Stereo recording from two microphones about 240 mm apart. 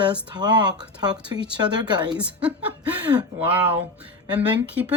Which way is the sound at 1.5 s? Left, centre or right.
Centre.